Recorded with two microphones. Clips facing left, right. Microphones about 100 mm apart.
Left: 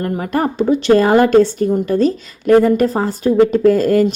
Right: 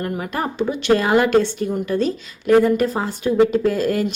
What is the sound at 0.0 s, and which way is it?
A woman's voice, 40° left (ahead or behind).